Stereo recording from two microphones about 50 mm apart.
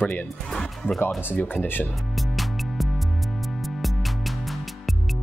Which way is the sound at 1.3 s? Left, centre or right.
Left.